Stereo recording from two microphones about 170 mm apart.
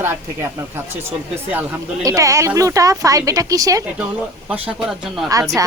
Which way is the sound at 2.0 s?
20° right (ahead or behind).